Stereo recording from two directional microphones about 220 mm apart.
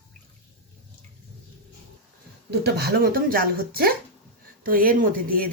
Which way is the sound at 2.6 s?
45° right (ahead or behind).